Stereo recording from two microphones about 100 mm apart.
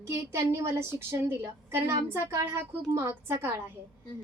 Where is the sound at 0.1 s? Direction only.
25° right (ahead or behind).